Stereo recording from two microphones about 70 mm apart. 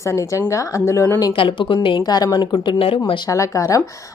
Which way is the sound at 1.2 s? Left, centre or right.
Left.